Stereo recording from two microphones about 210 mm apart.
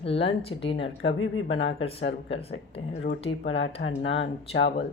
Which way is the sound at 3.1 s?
65° left (ahead or behind).